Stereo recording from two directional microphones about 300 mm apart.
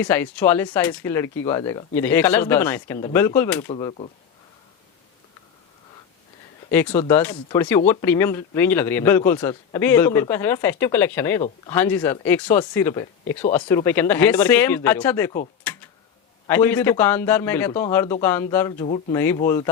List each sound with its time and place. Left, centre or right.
0.0 s speech: centre
6.7 s speech: centre
16.5 s speech: centre
18.8 s speech: left
19.1 s speech: centre